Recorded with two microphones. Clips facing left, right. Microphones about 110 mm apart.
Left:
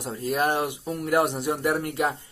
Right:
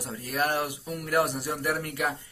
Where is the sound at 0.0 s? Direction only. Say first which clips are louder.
Left 4 dB; 20° left (ahead or behind).